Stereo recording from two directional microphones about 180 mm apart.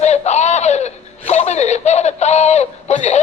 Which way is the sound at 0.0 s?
40° left (ahead or behind).